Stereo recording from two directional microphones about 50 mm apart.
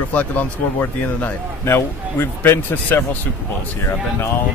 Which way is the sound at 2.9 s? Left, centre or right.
Left.